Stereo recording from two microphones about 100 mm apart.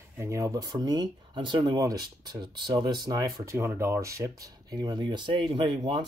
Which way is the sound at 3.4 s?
25° right (ahead or behind).